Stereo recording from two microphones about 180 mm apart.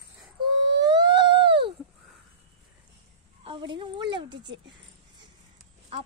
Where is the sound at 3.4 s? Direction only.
25° right (ahead or behind).